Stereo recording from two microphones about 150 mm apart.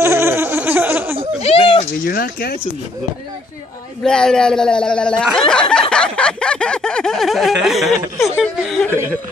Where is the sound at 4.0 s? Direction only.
5° left (ahead or behind).